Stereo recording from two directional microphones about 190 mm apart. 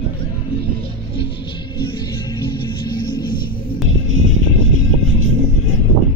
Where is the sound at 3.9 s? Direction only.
90° right.